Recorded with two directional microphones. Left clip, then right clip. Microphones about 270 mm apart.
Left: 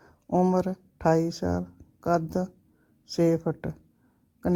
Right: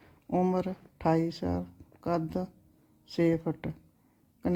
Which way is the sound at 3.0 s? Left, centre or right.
Left.